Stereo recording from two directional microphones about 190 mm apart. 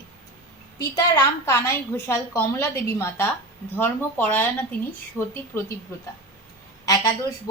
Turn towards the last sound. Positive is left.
turn(degrees=15)  # may be behind; listen again after turning